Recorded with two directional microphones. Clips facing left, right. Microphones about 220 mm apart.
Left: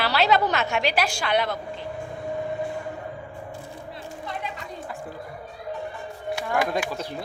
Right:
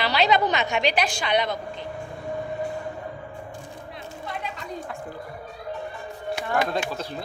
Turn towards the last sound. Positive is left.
turn(degrees=10)  # may be behind; listen again after turning